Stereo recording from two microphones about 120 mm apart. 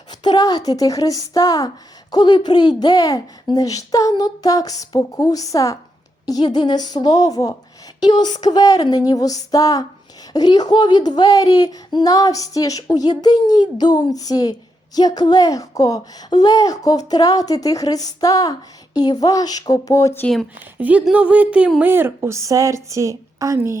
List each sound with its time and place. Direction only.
0.1 s speech: 35° left (ahead or behind)
20.2 s speech: centre (ahead or behind)
20.7 s a woman's voice: 15° right (ahead or behind)